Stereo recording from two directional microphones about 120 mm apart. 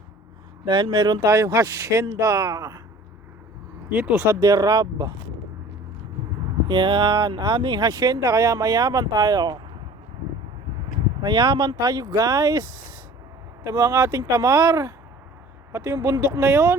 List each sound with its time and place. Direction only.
0.6 s speech: 40° right (ahead or behind); by 2.8 s 25° right (ahead or behind)
3.8 s speech: 10° right (ahead or behind)
4.4 s speech: 30° right (ahead or behind)
6.7 s speech: 40° right (ahead or behind)
11.2 s speech: 40° right (ahead or behind)
13.7 s speech: 25° right (ahead or behind)